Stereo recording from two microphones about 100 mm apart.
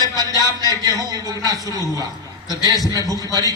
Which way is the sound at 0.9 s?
40° right (ahead or behind).